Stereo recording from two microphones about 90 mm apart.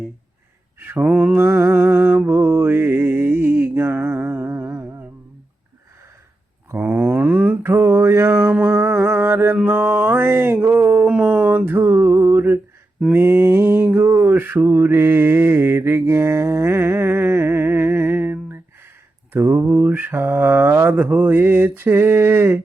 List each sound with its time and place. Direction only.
0.8 s mantra: 20° right (ahead or behind)
6.7 s mantra: 25° right (ahead or behind)